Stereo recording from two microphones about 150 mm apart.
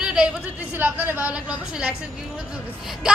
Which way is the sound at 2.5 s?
5° right (ahead or behind).